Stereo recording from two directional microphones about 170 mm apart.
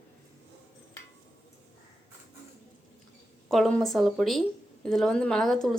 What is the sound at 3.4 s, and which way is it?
A woman's voice, 5° left (ahead or behind).